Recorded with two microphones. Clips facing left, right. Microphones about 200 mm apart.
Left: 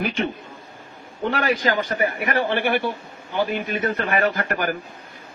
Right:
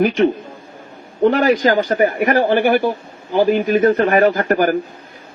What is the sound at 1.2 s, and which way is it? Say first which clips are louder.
A man's voice: right 9 dB; 40° right (ahead or behind).